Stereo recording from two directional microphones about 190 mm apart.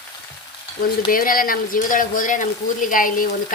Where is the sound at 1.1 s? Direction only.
50° left (ahead or behind).